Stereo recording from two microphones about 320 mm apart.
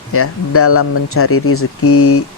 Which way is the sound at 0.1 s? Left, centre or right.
Left.